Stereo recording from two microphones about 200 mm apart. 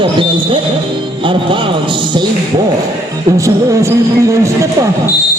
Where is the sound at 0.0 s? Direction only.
25° right (ahead or behind).